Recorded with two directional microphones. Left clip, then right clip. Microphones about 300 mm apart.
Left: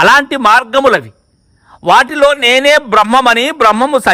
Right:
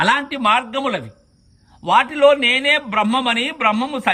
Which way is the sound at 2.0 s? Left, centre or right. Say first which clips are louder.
Left 5 dB; centre.